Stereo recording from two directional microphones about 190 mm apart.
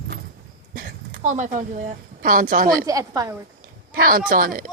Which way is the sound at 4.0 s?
50° right (ahead or behind).